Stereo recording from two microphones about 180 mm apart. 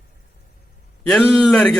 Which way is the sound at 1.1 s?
Centre (ahead or behind).